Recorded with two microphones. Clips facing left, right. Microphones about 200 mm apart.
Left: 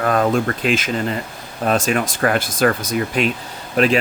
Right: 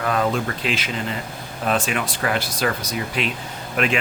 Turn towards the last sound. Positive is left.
turn(degrees=35)  # may be behind; listen again after turning